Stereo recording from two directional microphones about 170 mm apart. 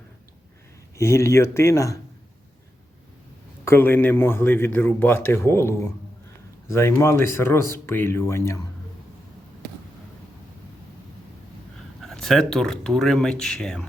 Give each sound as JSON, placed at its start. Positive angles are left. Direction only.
{"t": 0.9, "sound": "a man's voice", "side_deg": 15}
{"t": 3.6, "sound": "a man's voice", "side_deg": 15}
{"t": 12.0, "sound": "speech", "side_deg": 0}